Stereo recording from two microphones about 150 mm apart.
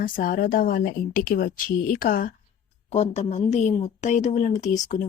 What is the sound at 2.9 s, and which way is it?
Speech, 45° left (ahead or behind).